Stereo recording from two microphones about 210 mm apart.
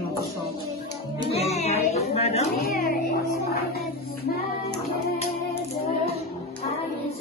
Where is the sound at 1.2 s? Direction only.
30° left (ahead or behind).